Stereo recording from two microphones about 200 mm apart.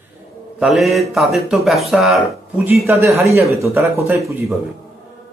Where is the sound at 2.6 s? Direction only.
15° right (ahead or behind).